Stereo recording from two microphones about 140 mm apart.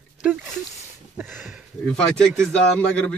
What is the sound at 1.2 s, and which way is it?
Speech, 15° right (ahead or behind).